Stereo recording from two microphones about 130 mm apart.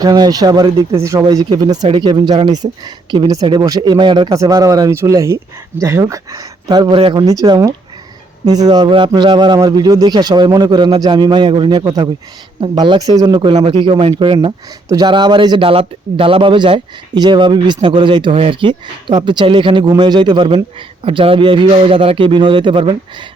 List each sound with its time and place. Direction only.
0.0 s speech: 30° right (ahead or behind)
14.3 s speech: 30° right (ahead or behind)